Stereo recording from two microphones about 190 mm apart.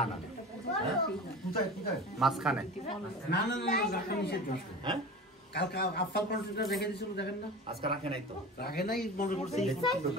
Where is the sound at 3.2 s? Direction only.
55° left (ahead or behind).